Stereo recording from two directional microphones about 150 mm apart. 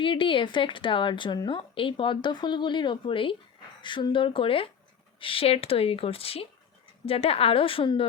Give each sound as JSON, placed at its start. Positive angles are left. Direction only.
{"t": 0.0, "sound": "speech", "side_deg": 35}